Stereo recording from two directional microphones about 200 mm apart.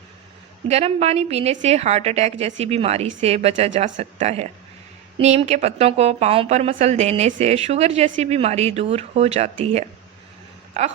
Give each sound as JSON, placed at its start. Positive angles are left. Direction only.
{"t": 0.7, "sound": "a woman's voice", "side_deg": -30}